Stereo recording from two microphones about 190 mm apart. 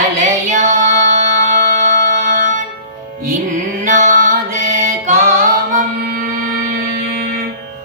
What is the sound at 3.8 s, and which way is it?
Music, 40° right (ahead or behind).